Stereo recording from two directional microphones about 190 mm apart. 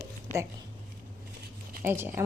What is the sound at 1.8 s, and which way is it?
Speech, 10° right (ahead or behind).